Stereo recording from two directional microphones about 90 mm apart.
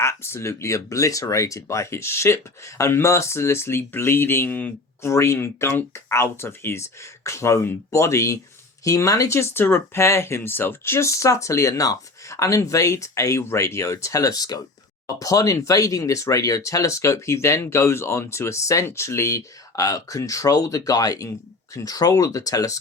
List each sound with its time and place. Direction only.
0.0 s speech: 30° left (ahead or behind)
5.0 s speech: 35° left (ahead or behind)